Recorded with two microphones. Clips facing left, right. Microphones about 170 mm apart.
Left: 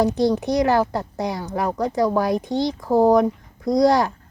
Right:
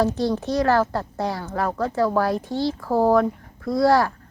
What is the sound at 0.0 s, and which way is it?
A woman's voice, 15° left (ahead or behind).